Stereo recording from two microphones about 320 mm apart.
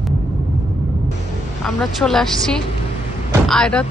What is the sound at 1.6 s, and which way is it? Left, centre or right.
Speech, centre.